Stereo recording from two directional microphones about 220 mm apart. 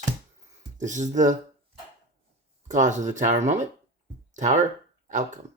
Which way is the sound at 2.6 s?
35° right (ahead or behind).